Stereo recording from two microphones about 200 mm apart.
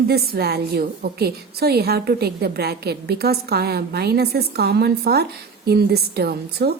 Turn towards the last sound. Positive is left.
turn(degrees=-50)  # may be behind; listen again after turning